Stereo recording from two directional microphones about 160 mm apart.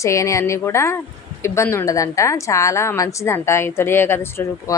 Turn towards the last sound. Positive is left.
turn(degrees=15)  # may be behind; listen again after turning